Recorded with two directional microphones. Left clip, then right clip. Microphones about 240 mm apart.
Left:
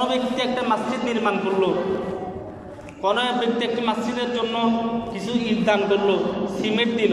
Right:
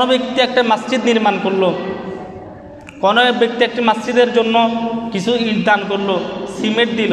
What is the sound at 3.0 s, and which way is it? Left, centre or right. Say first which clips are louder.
A man's voice: right 9 dB; right.